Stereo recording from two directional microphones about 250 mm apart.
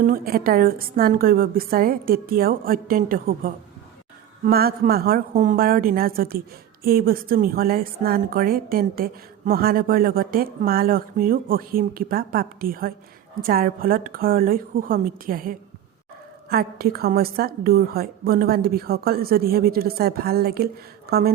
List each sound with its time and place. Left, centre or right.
0.0 s a woman's voice: right